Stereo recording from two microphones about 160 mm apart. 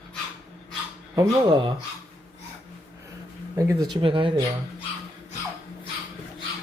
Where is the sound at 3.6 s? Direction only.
20° right (ahead or behind).